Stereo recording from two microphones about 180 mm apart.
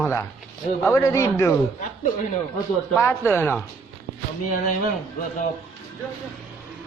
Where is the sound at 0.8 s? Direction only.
15° left (ahead or behind).